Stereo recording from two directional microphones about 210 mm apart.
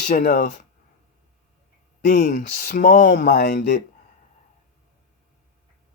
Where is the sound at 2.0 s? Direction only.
45° left (ahead or behind).